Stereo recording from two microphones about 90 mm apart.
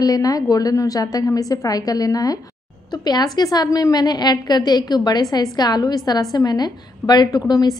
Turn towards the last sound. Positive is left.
turn(degrees=45)  # may be behind; listen again after turning